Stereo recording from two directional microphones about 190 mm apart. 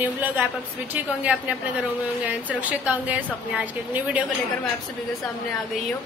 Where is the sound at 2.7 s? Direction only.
10° right (ahead or behind).